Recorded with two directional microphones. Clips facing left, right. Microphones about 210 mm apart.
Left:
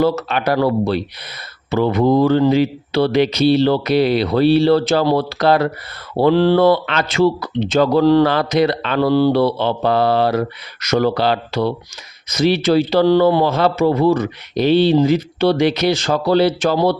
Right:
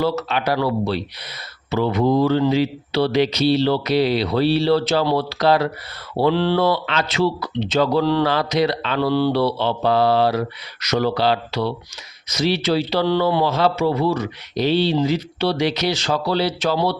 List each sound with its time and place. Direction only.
0.0 s speech: 50° left (ahead or behind)